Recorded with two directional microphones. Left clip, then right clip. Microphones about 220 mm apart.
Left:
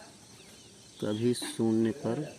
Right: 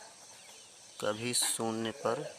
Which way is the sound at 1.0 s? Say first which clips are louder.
Left 2 dB; 35° right (ahead or behind).